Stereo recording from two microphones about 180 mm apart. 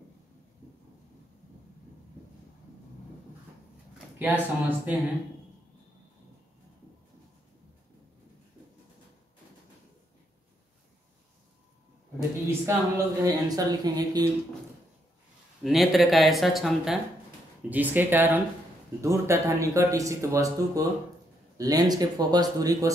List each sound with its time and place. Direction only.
4.2 s speech: 10° right (ahead or behind)
12.4 s speech: 15° right (ahead or behind)
15.6 s speech: centre (ahead or behind); by 22.9 s 20° right (ahead or behind)